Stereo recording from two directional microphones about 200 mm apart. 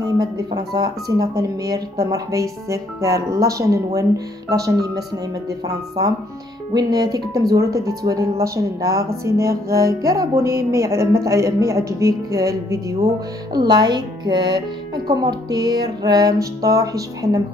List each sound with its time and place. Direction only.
0.0 s speech: 20° right (ahead or behind)
6.7 s speech: 20° right (ahead or behind)